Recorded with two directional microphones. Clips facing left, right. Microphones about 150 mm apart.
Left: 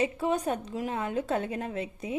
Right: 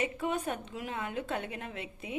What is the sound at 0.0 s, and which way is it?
A woman's voice, 35° left (ahead or behind).